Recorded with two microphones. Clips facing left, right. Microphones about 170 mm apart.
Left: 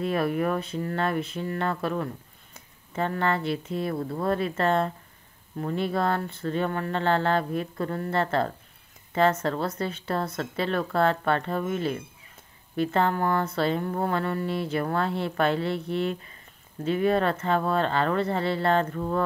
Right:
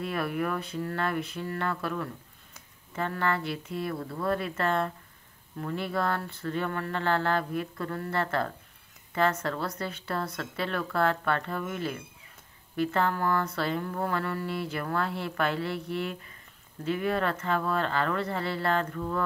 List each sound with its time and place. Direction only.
0.0 s speech: 25° left (ahead or behind)